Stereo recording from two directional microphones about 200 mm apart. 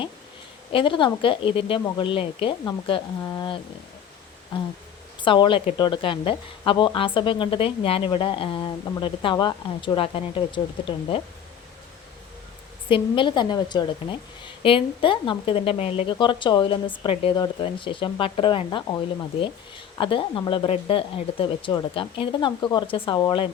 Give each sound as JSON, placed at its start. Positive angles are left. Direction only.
{"t": 0.7, "sound": "a woman's voice", "side_deg": 25}
{"t": 5.2, "sound": "a woman's voice", "side_deg": 25}
{"t": 12.9, "sound": "a woman's voice", "side_deg": 25}